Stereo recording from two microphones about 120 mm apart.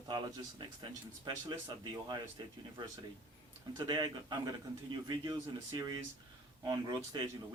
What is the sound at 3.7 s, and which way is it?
Speech, 35° right (ahead or behind).